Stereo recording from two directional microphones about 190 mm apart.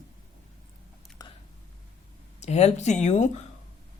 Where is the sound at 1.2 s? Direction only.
20° left (ahead or behind).